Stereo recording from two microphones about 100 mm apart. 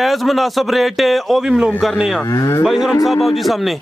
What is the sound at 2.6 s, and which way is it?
Speech, 5° right (ahead or behind).